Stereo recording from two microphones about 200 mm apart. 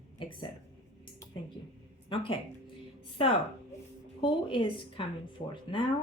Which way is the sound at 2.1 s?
25° left (ahead or behind).